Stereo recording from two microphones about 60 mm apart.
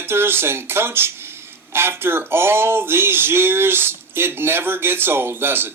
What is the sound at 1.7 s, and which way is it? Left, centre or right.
Speech, right.